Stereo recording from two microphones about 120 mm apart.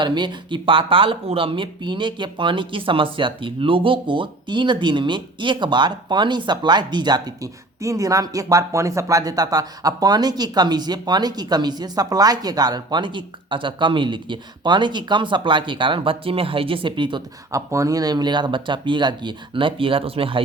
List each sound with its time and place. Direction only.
0.0 s speech: 40° right (ahead or behind)
17.5 s speech: 25° right (ahead or behind); by 20.4 s 50° right (ahead or behind)